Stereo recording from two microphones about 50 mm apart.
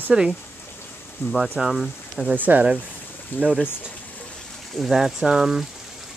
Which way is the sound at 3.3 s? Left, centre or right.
Left.